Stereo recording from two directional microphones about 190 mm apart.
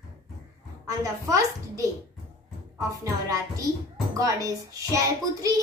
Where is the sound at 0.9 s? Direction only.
15° right (ahead or behind).